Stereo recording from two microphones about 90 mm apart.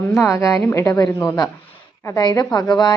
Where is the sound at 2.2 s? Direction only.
45° left (ahead or behind).